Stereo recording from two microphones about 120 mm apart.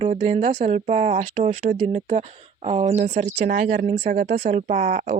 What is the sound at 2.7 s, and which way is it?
Speech, 70° right (ahead or behind).